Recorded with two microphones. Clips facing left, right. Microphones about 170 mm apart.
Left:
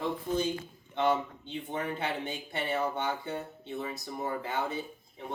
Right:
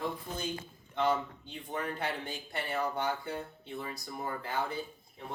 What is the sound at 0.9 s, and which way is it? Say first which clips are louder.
Speech: left 2 dB; 20° left (ahead or behind).